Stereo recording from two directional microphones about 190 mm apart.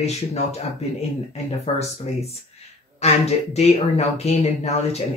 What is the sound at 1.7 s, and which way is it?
Speech, 30° left (ahead or behind).